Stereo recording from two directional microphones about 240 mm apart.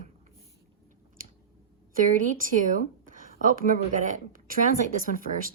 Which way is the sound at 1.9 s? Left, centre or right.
Right.